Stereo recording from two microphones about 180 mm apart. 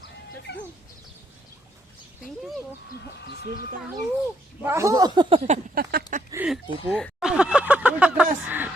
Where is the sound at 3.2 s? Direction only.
65° left (ahead or behind).